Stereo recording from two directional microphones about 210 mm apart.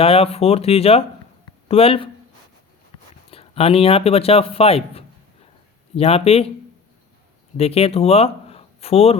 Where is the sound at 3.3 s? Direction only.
25° left (ahead or behind).